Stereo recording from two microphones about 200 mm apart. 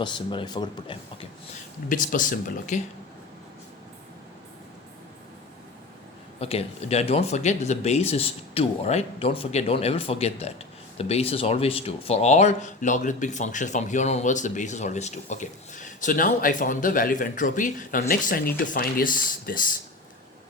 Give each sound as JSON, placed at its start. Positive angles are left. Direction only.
{"t": 0.0, "sound": "speech", "side_deg": 25}
{"t": 1.9, "sound": "speech", "side_deg": 40}
{"t": 6.4, "sound": "speech", "side_deg": 30}